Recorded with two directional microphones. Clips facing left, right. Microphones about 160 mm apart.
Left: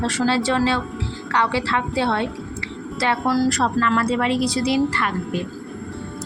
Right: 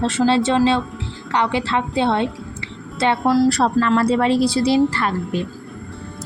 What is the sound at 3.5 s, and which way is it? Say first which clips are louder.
A woman's voice: right 3 dB; 35° right (ahead or behind).